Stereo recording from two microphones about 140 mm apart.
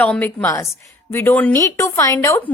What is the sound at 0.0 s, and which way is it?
Speech, 10° left (ahead or behind).